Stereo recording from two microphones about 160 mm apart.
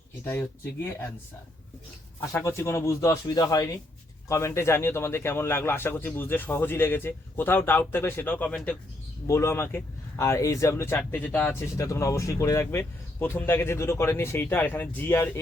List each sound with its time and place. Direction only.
2.3 s speech: 20° left (ahead or behind)
9.2 s speech: 20° left (ahead or behind)